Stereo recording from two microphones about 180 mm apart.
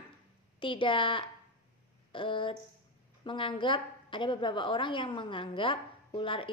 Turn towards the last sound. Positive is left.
turn(degrees=30)  # may be behind; listen again after turning